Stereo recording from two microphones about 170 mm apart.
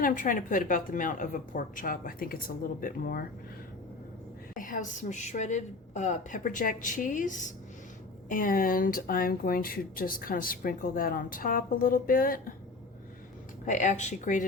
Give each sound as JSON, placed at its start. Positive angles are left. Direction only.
{"t": 0.0, "sound": "a woman's voice", "side_deg": 55}
{"t": 4.5, "sound": "a woman's voice", "side_deg": 50}
{"t": 13.7, "sound": "a woman's voice", "side_deg": 45}